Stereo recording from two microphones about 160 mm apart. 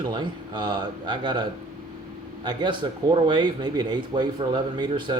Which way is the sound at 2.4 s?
30° right (ahead or behind).